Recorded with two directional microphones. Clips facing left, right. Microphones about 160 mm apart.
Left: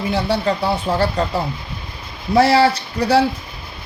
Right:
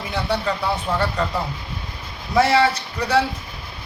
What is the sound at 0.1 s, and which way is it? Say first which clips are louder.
A man's voice: left 3 dB; 30° left (ahead or behind).